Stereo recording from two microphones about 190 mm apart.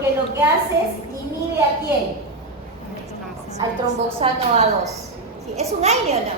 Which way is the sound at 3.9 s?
35° right (ahead or behind).